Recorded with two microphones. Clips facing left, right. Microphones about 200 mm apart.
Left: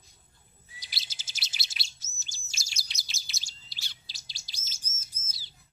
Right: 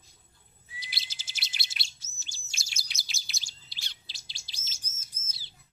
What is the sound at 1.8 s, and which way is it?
Chirp, 40° left (ahead or behind).